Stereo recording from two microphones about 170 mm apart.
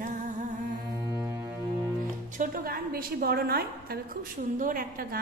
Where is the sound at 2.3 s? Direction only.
60° right (ahead or behind).